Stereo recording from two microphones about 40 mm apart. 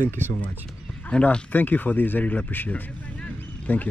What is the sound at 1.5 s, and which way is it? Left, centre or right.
Speech, left.